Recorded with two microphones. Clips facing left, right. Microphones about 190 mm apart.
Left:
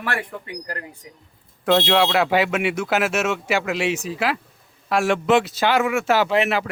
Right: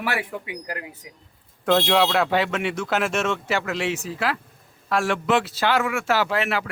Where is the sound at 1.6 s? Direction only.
5° left (ahead or behind).